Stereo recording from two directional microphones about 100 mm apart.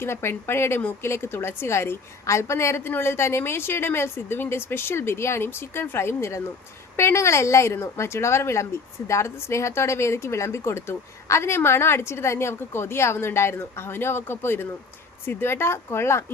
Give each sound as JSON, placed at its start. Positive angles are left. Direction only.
{"t": 0.0, "sound": "a woman's voice", "side_deg": 25}